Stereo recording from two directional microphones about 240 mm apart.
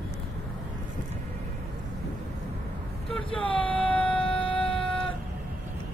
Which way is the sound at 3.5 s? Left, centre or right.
Centre.